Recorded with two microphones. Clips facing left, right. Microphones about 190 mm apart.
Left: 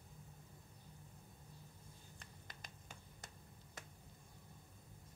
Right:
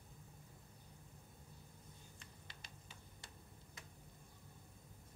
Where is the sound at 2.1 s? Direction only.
45° left (ahead or behind).